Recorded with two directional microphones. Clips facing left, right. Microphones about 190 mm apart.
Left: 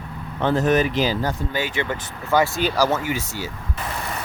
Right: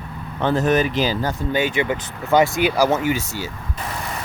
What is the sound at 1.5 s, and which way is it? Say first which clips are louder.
Speech: right 5 dB; 15° right (ahead or behind).